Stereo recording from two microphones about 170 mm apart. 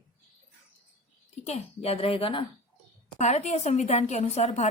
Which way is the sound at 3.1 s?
45° left (ahead or behind).